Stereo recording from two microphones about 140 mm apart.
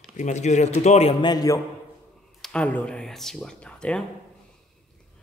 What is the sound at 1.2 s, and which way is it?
Speech, 25° left (ahead or behind).